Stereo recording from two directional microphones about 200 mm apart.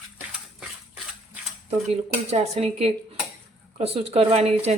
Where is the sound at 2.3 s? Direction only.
30° right (ahead or behind).